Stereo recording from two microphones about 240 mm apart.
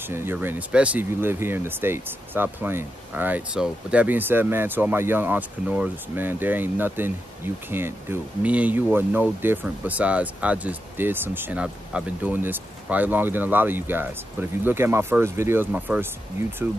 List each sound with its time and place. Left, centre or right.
0.0 s speech: centre